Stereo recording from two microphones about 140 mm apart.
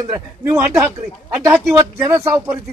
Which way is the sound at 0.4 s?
15° right (ahead or behind).